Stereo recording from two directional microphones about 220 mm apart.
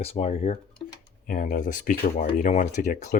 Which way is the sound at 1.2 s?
40° left (ahead or behind).